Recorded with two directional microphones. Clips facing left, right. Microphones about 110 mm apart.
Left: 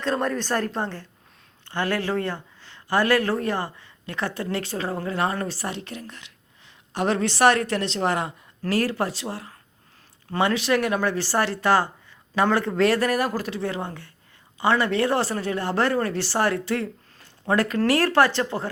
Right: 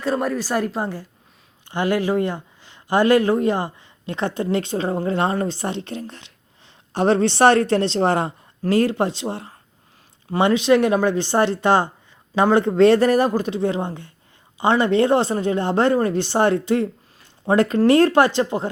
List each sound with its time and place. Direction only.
0.0 s a woman's voice: 5° right (ahead or behind)